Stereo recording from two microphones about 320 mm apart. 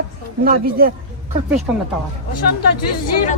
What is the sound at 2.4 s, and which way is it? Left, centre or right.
Speech, left.